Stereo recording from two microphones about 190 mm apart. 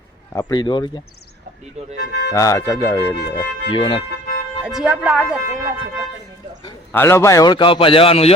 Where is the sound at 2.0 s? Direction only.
65° left (ahead or behind).